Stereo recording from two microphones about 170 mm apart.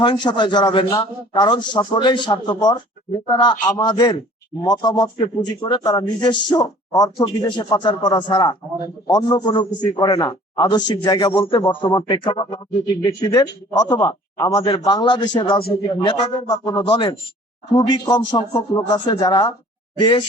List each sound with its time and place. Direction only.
0.0 s speech: 25° left (ahead or behind)